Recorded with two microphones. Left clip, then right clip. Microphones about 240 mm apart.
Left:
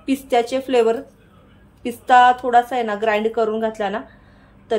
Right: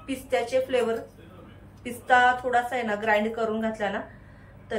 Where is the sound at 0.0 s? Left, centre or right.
Left.